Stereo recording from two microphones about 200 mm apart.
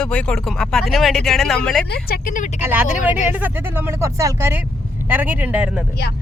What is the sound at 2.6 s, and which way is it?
Speech, 10° right (ahead or behind).